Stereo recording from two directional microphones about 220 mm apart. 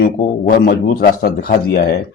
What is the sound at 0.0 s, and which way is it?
Speech, 45° left (ahead or behind).